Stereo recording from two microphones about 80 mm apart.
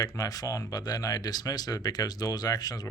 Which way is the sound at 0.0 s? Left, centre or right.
Left.